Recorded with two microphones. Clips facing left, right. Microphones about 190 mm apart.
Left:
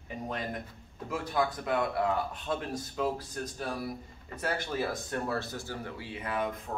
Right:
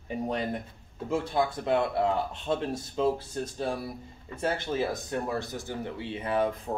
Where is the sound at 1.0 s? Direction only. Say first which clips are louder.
Right 3 dB; 25° right (ahead or behind).